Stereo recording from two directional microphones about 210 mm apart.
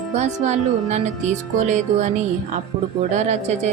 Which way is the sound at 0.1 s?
35° right (ahead or behind).